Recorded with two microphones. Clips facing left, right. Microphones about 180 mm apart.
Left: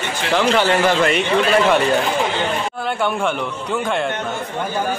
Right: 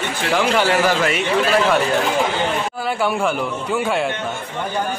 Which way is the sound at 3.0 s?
5° right (ahead or behind).